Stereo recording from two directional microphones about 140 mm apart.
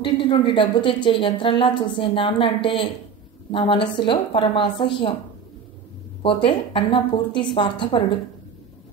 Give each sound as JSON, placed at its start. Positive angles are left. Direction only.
{"t": 0.0, "sound": "a woman's voice", "side_deg": 35}
{"t": 6.2, "sound": "a woman's voice", "side_deg": 40}